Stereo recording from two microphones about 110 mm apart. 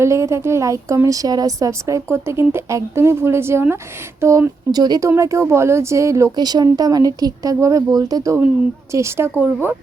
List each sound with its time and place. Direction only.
0.0 s a woman's voice: 25° right (ahead or behind)